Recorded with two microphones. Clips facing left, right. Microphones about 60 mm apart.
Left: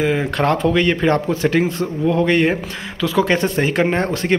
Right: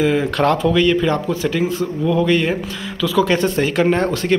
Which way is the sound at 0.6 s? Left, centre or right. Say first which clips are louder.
Right 1 dB; left.